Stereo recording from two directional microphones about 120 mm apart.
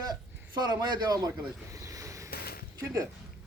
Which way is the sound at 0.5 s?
35° right (ahead or behind).